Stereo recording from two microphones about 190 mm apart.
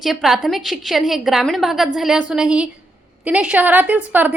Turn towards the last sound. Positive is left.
turn(degrees=-10)  # may be behind; listen again after turning